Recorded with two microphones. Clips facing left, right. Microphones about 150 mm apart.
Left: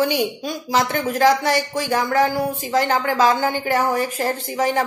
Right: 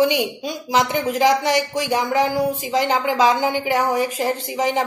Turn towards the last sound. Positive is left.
turn(degrees=-15)  # may be behind; listen again after turning